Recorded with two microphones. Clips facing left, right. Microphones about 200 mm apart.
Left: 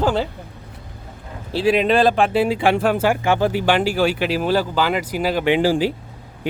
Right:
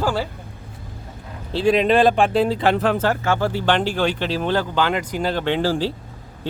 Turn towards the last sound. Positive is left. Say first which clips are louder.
# left 4 dB
turn(degrees=15)  # may be behind; listen again after turning